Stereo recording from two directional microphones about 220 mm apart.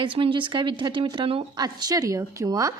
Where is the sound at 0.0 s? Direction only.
25° right (ahead or behind).